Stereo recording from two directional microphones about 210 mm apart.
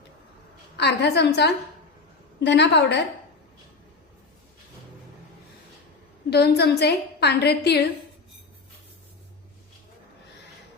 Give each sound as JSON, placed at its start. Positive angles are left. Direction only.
{"t": 0.8, "sound": "a woman's voice", "side_deg": 55}
{"t": 6.3, "sound": "a woman's voice", "side_deg": 50}